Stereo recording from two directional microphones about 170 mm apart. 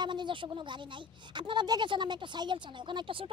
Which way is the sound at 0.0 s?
25° right (ahead or behind).